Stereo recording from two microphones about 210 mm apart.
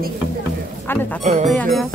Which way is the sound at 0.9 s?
10° left (ahead or behind).